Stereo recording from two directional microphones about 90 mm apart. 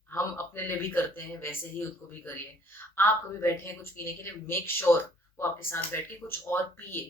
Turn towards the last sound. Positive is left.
turn(degrees=25)  # may be behind; listen again after turning